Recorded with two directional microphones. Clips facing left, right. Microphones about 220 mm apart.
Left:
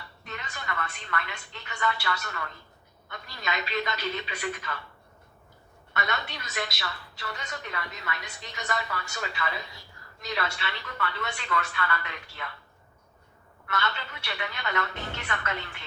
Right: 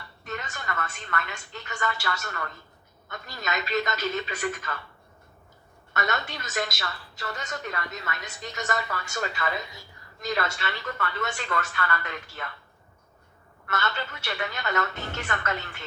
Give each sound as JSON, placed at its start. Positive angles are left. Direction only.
{"t": 0.3, "sound": "a woman's voice", "side_deg": -45}
{"t": 5.9, "sound": "a woman's voice", "side_deg": -45}
{"t": 13.7, "sound": "a woman's voice", "side_deg": -45}